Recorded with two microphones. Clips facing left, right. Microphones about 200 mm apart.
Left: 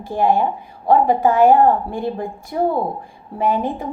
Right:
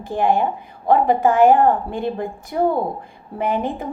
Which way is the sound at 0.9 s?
50° right (ahead or behind).